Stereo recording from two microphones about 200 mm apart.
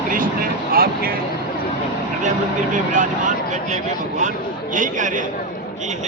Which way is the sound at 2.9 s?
40° right (ahead or behind).